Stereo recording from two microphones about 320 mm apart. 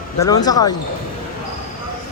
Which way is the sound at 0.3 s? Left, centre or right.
Centre.